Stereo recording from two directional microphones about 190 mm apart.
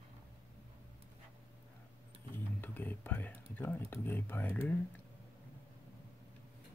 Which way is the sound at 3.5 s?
10° left (ahead or behind).